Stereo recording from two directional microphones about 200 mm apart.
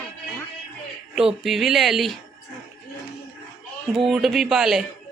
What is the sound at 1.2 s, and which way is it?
Speech, centre (ahead or behind).